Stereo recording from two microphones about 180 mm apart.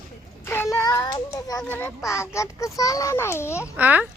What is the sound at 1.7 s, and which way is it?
A child's voice, 15° left (ahead or behind).